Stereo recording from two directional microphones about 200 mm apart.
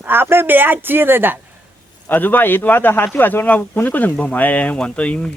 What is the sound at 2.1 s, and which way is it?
Speech, 10° left (ahead or behind).